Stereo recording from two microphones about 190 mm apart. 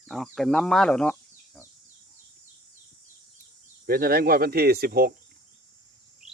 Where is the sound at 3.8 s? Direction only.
50° right (ahead or behind).